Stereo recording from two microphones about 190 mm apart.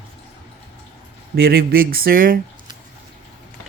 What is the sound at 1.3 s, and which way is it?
Speech, 55° right (ahead or behind).